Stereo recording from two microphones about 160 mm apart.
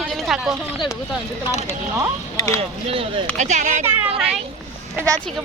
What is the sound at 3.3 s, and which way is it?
Speech, 50° right (ahead or behind).